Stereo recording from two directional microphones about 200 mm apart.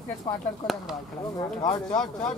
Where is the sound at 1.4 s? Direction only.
20° left (ahead or behind).